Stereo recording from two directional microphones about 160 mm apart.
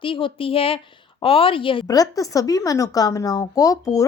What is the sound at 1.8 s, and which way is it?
A woman's voice, 20° left (ahead or behind).